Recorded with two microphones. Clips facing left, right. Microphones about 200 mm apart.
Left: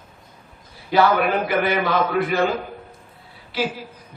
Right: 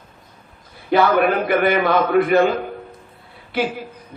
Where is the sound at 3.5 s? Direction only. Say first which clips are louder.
Right 3 dB; 55° right (ahead or behind).